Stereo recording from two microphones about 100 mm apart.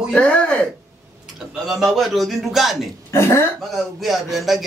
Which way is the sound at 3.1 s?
25° left (ahead or behind).